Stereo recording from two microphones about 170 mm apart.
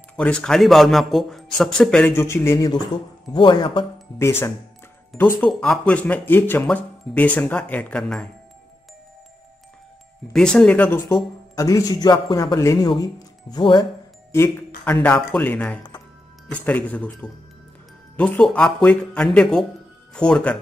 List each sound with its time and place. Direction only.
0.1 s a man's voice: 5° left (ahead or behind); by 3.8 s 30° left (ahead or behind)
4.2 s speech: 15° left (ahead or behind)
10.3 s a man's voice: 5° left (ahead or behind); by 13.8 s 25° left (ahead or behind)
15.0 s a man's voice: 10° left (ahead or behind)